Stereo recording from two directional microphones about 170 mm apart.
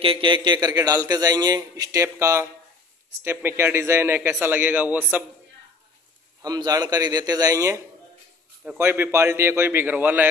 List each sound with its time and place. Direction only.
0.0 s a man's voice: 30° right (ahead or behind); by 5.2 s 10° right (ahead or behind)
6.4 s a man's voice: 20° right (ahead or behind)